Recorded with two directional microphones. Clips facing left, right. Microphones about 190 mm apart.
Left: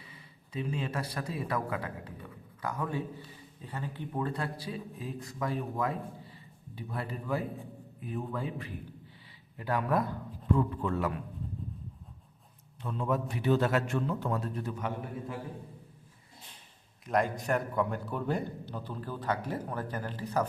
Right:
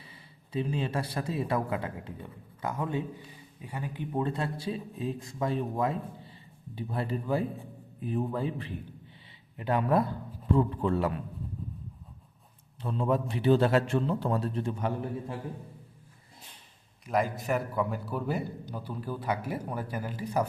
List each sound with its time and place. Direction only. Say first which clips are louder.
0.0 s speech: right 1 dB; 30° right (ahead or behind)
3.6 s a man's voice: right 2 dB; 10° right (ahead or behind); by 11.1 s 30° right (ahead or behind)
12.8 s a man's voice: right 3 dB; 30° right (ahead or behind)
17.1 s a man's voice: right 1 dB; centre (ahead or behind)